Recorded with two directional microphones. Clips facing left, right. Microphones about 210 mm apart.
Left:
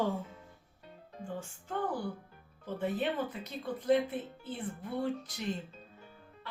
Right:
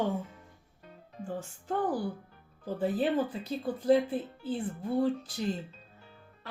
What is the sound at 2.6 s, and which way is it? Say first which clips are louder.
Speech: right 4 dB; 35° right (ahead or behind).